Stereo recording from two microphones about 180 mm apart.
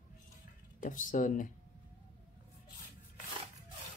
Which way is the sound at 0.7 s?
45° left (ahead or behind).